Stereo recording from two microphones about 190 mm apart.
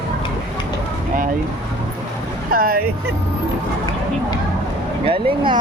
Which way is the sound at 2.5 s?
50° right (ahead or behind).